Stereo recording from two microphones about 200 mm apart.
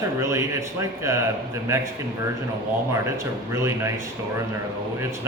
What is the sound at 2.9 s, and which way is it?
Speech, 15° right (ahead or behind).